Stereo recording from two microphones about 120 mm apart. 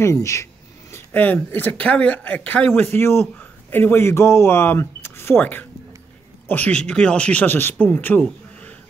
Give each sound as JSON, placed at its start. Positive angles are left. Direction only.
{"t": 0.0, "sound": "speech", "side_deg": 25}
{"t": 0.9, "sound": "speech", "side_deg": 15}